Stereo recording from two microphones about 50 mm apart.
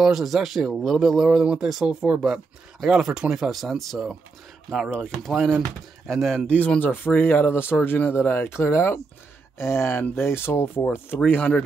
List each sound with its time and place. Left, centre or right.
0.0 s speech: centre
1.4 s speech: centre
6.8 s speech: left
11.2 s speech: left